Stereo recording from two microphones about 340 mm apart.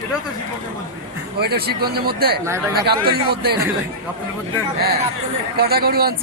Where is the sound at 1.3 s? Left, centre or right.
Right.